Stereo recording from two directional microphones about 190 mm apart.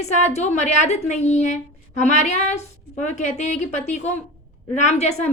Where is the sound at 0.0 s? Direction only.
35° left (ahead or behind).